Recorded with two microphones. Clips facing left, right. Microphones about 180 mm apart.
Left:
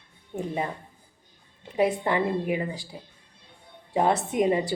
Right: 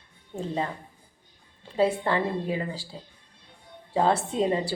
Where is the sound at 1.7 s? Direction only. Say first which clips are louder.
Even; 20° left (ahead or behind).